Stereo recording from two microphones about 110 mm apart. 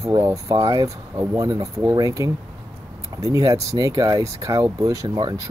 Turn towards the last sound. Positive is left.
turn(degrees=-30)  # may be behind; listen again after turning